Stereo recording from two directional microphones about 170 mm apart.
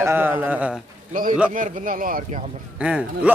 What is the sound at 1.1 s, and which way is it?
Speech, 55° right (ahead or behind).